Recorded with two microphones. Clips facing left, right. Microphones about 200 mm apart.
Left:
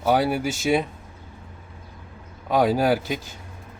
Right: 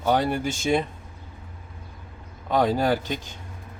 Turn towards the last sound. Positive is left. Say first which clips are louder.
# left 2 dB
turn(degrees=5)  # may be behind; listen again after turning